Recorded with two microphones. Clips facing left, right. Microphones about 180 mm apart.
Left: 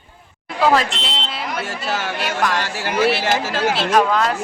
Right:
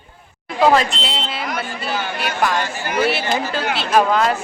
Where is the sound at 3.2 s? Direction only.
90° left.